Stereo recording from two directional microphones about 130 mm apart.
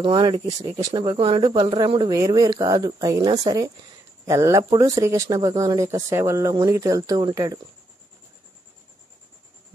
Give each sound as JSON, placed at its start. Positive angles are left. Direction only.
{"t": 0.0, "sound": "speech", "side_deg": -40}
{"t": 0.6, "sound": "speech", "side_deg": -55}
{"t": 0.9, "sound": "speech", "side_deg": -40}